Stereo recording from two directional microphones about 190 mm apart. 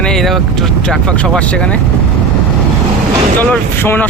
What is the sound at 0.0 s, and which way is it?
Speech, centre (ahead or behind).